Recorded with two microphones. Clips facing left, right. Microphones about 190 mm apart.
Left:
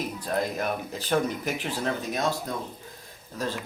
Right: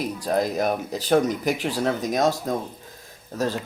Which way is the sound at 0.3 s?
40° right (ahead or behind).